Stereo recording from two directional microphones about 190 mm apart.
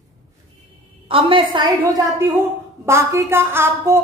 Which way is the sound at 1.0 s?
30° right (ahead or behind).